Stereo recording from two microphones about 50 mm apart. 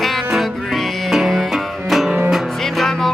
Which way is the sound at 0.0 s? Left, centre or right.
Centre.